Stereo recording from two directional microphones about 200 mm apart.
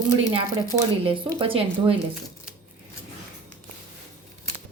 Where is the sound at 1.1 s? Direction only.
25° right (ahead or behind).